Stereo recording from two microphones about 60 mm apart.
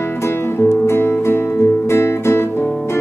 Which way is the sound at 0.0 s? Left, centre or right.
Left.